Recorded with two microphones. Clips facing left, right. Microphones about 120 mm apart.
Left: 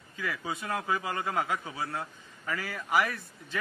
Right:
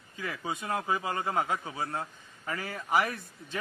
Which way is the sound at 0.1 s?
30° right (ahead or behind).